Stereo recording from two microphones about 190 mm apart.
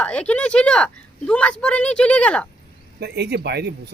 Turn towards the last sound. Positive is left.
turn(degrees=-60)  # may be behind; listen again after turning